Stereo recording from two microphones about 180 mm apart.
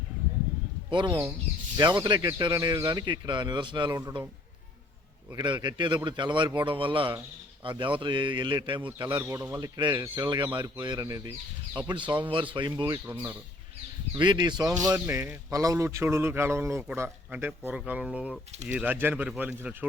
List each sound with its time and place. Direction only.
0.9 s speech: 25° right (ahead or behind)
5.3 s speech: 25° right (ahead or behind)
9.1 s speech: 15° right (ahead or behind)
13.1 s a man's voice: 10° right (ahead or behind)
14.2 s a man's voice: 25° right (ahead or behind); by 19.9 s 10° right (ahead or behind)